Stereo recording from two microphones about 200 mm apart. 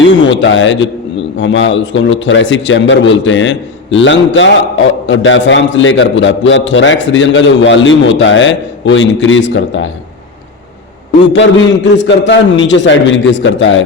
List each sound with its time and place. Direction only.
0.0 s a man's voice: 65° left (ahead or behind)
11.9 s a man's voice: 65° left (ahead or behind)